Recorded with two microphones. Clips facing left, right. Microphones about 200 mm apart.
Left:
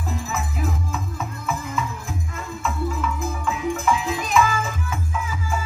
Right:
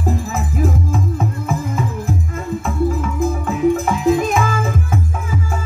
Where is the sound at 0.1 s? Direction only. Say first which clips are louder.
Right 6 dB; 50° right (ahead or behind).